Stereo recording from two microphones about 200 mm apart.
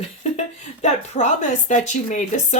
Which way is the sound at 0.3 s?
35° left (ahead or behind).